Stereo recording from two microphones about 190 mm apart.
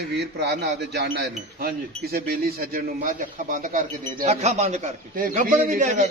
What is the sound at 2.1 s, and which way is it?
A man's voice, 55° right (ahead or behind).